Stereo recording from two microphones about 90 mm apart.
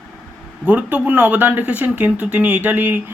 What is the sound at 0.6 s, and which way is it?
A man's voice, 15° right (ahead or behind).